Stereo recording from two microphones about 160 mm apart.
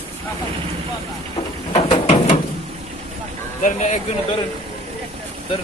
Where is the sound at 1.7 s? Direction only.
40° left (ahead or behind).